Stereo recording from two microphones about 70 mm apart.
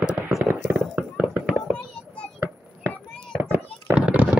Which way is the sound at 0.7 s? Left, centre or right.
Right.